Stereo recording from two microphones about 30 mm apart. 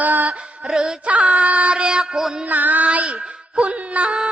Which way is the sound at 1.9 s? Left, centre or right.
Right.